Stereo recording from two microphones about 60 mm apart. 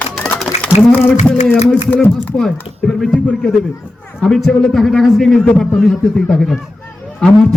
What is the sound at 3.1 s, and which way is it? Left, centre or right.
A man's voice, centre.